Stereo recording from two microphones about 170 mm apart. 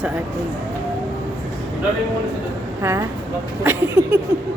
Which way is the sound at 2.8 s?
15° right (ahead or behind).